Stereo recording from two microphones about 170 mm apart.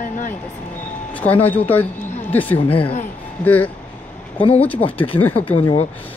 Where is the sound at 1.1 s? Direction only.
10° left (ahead or behind).